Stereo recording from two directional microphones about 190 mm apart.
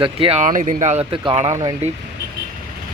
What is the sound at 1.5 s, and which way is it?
Speech, 15° right (ahead or behind).